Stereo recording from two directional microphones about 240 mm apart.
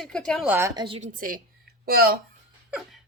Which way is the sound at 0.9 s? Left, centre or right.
Right.